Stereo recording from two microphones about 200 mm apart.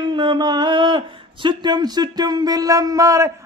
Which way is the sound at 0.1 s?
25° right (ahead or behind).